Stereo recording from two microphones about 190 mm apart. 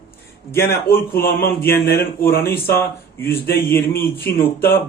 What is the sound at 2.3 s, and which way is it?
Speech, 10° left (ahead or behind).